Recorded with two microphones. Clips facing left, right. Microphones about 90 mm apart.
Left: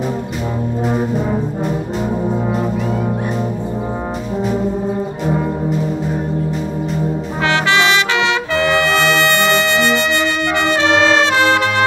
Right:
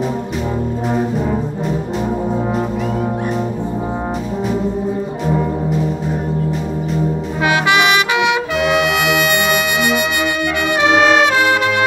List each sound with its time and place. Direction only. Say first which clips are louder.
7.4 s trumpet: right 1 dB; 15° right (ahead or behind)